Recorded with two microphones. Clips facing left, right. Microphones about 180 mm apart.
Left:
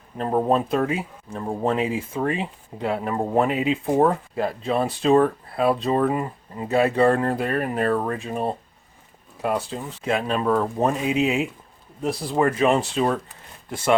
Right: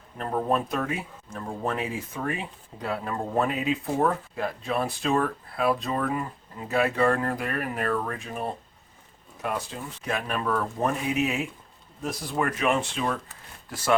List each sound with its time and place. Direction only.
0.2 s speech: 30° left (ahead or behind)